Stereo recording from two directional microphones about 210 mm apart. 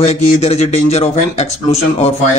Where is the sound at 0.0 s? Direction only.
30° left (ahead or behind).